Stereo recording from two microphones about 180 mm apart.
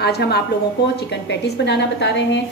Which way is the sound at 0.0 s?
65° left (ahead or behind).